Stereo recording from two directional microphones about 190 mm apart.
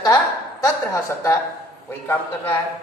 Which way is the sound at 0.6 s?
15° left (ahead or behind).